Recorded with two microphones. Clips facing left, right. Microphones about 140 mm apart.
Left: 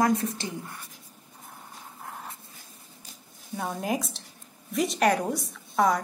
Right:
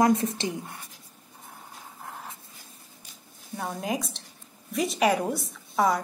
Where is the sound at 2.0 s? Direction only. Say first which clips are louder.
Even; centre (ahead or behind).